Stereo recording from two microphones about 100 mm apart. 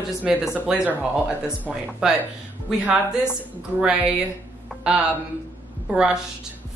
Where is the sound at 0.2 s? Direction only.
10° right (ahead or behind).